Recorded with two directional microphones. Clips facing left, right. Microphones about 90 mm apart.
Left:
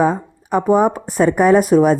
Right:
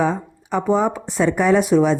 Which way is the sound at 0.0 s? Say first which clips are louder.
Left 4 dB; 45° left (ahead or behind).